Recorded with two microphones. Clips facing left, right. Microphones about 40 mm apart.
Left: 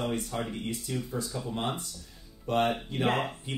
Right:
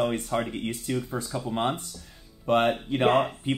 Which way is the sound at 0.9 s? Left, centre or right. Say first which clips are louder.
Right 6 dB; right.